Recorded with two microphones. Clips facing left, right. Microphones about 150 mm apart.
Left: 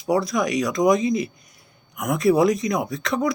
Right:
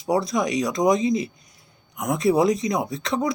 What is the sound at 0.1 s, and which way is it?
Speech, 30° right (ahead or behind).